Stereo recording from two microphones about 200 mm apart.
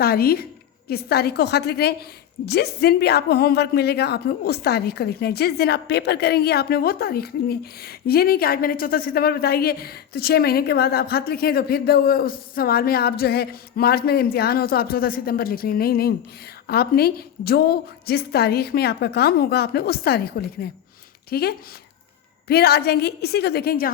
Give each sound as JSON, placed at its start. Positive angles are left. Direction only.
{"t": 0.0, "sound": "a woman's voice", "side_deg": 50}